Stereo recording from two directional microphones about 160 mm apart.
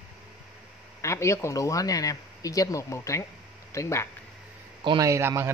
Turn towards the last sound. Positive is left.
turn(degrees=-15)  # may be behind; listen again after turning